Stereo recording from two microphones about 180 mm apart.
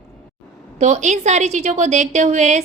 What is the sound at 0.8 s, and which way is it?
Speech, 40° right (ahead or behind).